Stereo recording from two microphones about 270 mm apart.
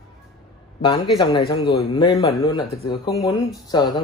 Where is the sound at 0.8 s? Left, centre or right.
Centre.